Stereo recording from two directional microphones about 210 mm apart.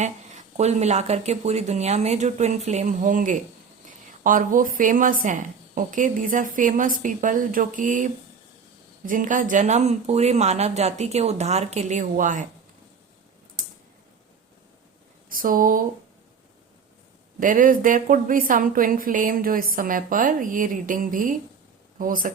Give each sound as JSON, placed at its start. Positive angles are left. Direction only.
{"t": 0.0, "sound": "a woman's voice", "side_deg": -35}
{"t": 15.3, "sound": "a woman's voice", "side_deg": -40}
{"t": 17.4, "sound": "a woman's voice", "side_deg": -40}